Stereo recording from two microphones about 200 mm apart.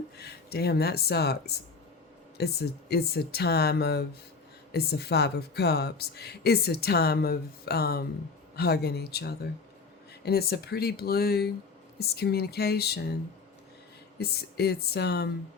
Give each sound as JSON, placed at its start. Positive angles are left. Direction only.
{"t": 0.2, "sound": "speech", "side_deg": 55}
{"t": 14.2, "sound": "speech", "side_deg": 55}